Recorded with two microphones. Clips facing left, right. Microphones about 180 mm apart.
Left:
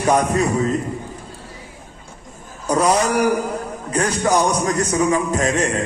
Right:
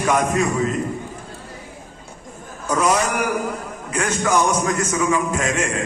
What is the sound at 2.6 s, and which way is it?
A man's voice, 35° left (ahead or behind).